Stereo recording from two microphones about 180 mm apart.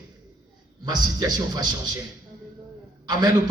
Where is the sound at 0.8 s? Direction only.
20° right (ahead or behind).